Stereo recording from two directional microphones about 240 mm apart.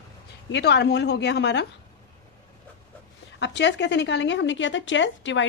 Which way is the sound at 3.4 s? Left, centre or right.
Left.